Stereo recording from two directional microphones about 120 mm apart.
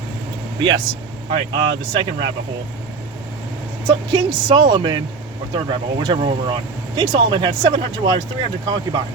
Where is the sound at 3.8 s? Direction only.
40° right (ahead or behind).